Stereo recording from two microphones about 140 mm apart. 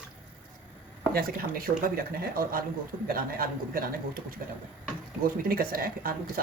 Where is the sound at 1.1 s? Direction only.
90° right.